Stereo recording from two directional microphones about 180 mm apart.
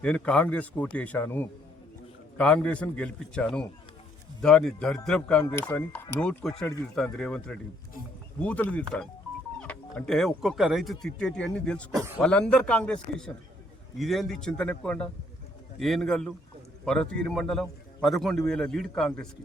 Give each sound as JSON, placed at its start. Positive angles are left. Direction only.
{"t": 0.0, "sound": "speech", "side_deg": 5}
{"t": 11.9, "sound": "a man's voice", "side_deg": -15}
{"t": 12.2, "sound": "speech", "side_deg": 5}